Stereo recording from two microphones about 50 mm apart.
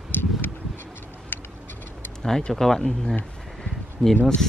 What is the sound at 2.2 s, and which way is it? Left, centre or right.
Speech, centre.